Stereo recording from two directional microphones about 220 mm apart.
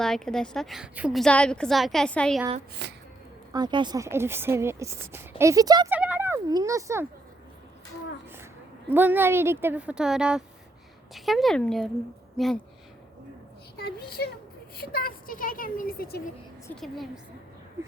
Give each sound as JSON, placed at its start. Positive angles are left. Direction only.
{"t": 0.0, "sound": "a woman's voice", "side_deg": 5}
{"t": 2.8, "sound": "speech", "side_deg": -50}
{"t": 3.5, "sound": "speech", "side_deg": -20}
{"t": 6.0, "sound": "fowl", "side_deg": -10}
{"t": 8.9, "sound": "a woman's voice", "side_deg": -10}
{"t": 13.7, "sound": "speech", "side_deg": 45}
{"t": 16.8, "sound": "a woman's voice", "side_deg": 0}